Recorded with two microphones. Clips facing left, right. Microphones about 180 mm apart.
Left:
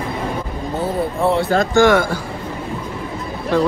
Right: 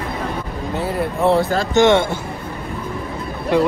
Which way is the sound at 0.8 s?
Centre (ahead or behind).